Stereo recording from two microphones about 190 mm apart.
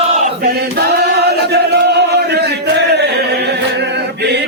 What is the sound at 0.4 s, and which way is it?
Chant, 55° right (ahead or behind).